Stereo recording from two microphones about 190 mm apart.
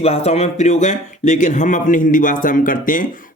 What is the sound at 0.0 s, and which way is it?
Speech, 30° left (ahead or behind).